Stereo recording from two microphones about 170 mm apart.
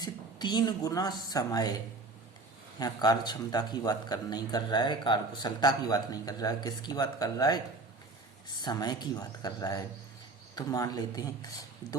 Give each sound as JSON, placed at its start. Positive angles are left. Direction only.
{"t": 0.0, "sound": "a woman's voice", "side_deg": 25}
{"t": 8.6, "sound": "speech", "side_deg": 25}